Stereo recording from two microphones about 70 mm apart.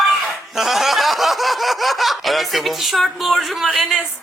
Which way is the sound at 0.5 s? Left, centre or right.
Centre.